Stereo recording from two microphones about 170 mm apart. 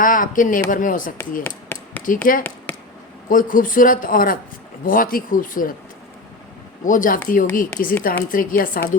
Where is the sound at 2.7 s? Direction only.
10° left (ahead or behind).